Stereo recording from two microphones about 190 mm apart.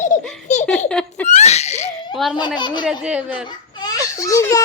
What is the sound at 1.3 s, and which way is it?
Speech, 35° left (ahead or behind).